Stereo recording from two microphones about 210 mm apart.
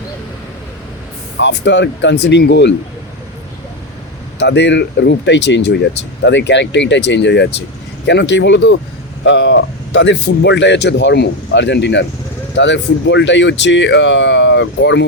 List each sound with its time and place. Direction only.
1.4 s speech: 55° left (ahead or behind)
4.4 s speech: 55° left (ahead or behind)